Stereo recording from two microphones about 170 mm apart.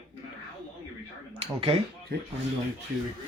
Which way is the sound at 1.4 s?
35° right (ahead or behind).